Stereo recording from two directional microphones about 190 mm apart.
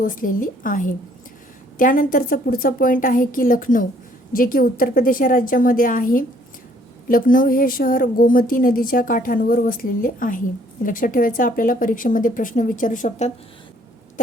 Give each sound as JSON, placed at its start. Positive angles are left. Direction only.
{"t": 0.0, "sound": "a woman's voice", "side_deg": 45}